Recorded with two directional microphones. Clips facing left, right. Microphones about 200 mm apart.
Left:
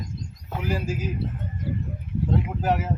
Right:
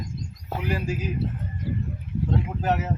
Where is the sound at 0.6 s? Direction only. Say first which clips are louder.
Even; centre (ahead or behind).